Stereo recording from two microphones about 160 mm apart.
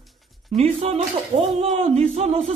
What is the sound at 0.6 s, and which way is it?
Speech, 40° right (ahead or behind).